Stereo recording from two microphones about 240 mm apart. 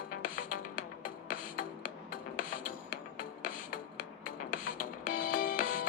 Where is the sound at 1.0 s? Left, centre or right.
Left.